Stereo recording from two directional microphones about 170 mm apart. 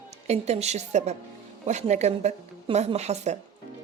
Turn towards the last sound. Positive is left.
turn(degrees=-40)  # may be behind; listen again after turning